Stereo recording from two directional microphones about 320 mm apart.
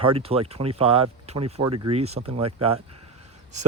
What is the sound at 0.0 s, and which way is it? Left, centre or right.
Speech, centre.